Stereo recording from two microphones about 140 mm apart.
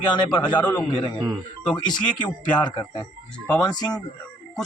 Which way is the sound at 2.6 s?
30° left (ahead or behind).